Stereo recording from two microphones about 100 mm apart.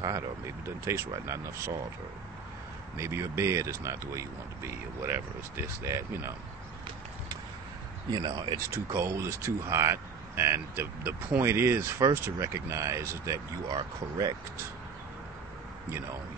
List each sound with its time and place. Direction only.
0.7 s speech: 25° right (ahead or behind)
3.0 s speech: 30° right (ahead or behind)
8.1 s speech: 45° right (ahead or behind)
8.5 s speech: 25° right (ahead or behind)
13.7 s speech: 40° right (ahead or behind)